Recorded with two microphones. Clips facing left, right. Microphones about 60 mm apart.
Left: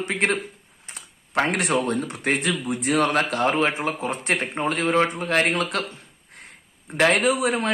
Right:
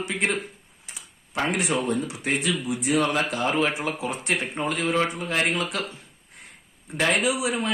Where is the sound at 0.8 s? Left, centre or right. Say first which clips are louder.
Left 2 dB; left.